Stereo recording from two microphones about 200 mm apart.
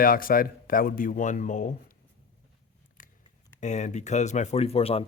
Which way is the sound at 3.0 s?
45° left (ahead or behind).